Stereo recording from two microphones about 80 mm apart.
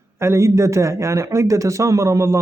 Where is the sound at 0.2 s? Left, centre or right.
Right.